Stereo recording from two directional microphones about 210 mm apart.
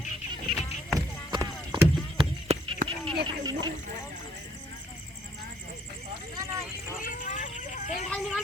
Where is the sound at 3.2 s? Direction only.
20° right (ahead or behind).